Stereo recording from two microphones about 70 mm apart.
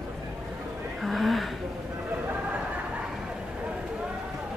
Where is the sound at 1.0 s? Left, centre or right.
Centre.